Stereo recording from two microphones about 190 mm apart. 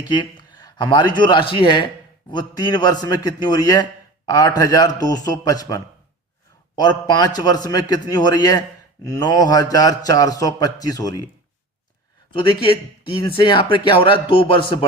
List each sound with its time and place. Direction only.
0.1 s a man's voice: 25° left (ahead or behind)
12.3 s a man's voice: 25° left (ahead or behind)